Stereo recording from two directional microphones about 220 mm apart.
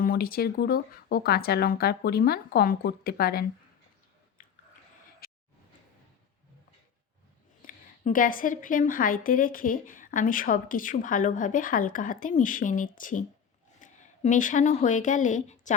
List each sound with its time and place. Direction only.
0.0 s speech: 40° left (ahead or behind)
4.4 s chewing: 35° left (ahead or behind)
5.2 s a sound: 40° left (ahead or behind)
7.6 s a woman's voice: 40° left (ahead or behind)